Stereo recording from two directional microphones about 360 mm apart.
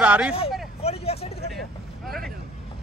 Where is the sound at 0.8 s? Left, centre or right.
Centre.